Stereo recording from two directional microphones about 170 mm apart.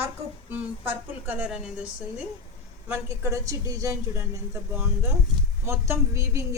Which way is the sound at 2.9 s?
15° right (ahead or behind).